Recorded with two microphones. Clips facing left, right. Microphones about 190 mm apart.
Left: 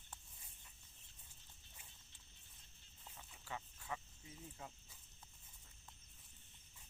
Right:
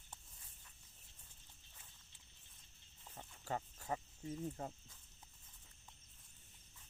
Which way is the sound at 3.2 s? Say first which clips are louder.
Right 7 dB; 45° right (ahead or behind).